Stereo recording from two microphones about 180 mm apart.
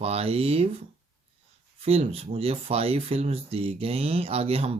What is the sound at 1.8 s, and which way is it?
Speech, 35° right (ahead or behind).